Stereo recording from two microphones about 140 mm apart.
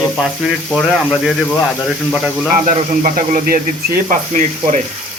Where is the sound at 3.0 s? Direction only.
85° right; by 4.8 s 60° right (ahead or behind).